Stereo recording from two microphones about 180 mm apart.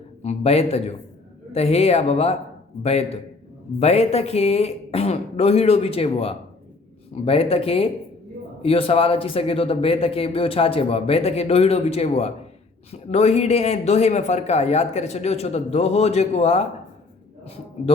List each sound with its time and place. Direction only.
0.2 s a man's voice: 35° left (ahead or behind)